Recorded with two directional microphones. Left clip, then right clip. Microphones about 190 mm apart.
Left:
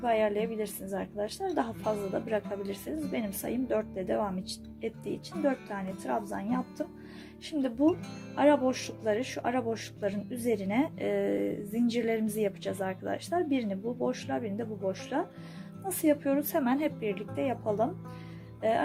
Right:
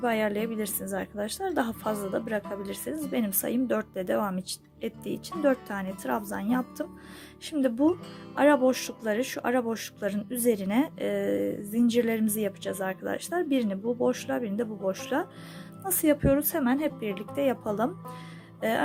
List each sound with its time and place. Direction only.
0.0 s speech: 35° right (ahead or behind)
8.4 s speech: 30° right (ahead or behind)